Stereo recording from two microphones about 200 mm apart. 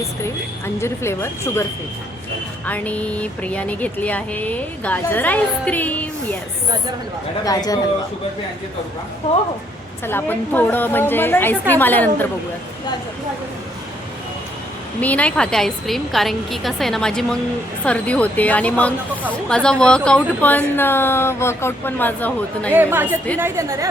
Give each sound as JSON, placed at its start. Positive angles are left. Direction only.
{"t": 0.8, "sound": "speech", "side_deg": 15}
{"t": 2.6, "sound": "speech", "side_deg": 5}
{"t": 7.4, "sound": "speech", "side_deg": 20}
{"t": 10.1, "sound": "speech", "side_deg": 10}
{"t": 15.0, "sound": "a woman's voice", "side_deg": 5}
{"t": 22.7, "sound": "a woman's voice", "side_deg": -10}